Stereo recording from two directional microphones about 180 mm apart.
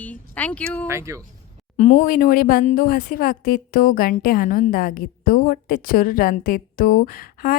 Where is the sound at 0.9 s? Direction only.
15° right (ahead or behind).